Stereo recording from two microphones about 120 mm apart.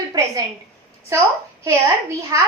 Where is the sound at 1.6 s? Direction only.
25° right (ahead or behind).